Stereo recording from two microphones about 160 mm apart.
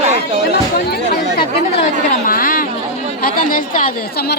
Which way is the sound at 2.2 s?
60° left (ahead or behind).